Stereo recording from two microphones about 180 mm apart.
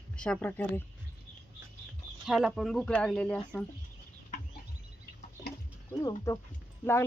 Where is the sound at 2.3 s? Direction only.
Centre (ahead or behind).